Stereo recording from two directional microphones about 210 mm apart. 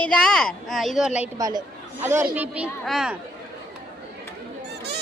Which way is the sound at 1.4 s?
20° right (ahead or behind).